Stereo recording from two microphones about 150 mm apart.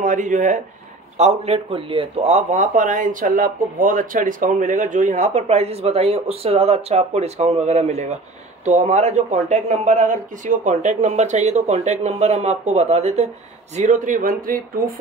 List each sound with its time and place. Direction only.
0.0 s speech: 55° right (ahead or behind)
13.7 s speech: 55° right (ahead or behind)